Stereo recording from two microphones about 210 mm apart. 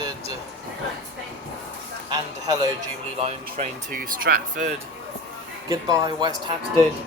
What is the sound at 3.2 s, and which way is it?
Speech, 35° right (ahead or behind).